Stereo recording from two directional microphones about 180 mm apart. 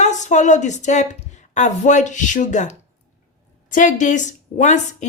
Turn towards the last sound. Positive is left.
turn(degrees=40)  # may be behind; listen again after turning